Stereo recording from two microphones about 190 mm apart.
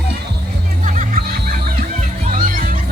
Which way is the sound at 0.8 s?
45° right (ahead or behind).